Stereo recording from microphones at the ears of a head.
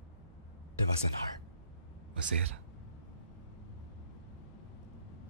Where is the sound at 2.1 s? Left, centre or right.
Right.